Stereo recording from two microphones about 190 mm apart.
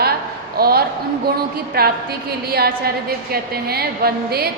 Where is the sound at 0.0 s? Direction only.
55° right (ahead or behind).